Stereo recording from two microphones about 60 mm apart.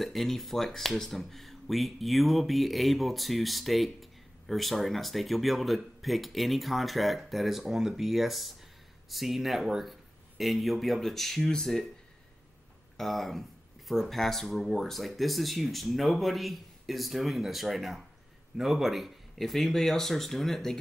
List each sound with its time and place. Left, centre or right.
0.0 s speech: centre
12.9 s speech: centre